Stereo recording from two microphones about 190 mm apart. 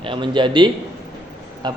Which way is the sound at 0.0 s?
25° right (ahead or behind).